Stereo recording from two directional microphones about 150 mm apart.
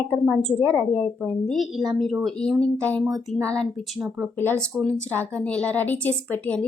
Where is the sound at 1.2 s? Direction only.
Centre (ahead or behind).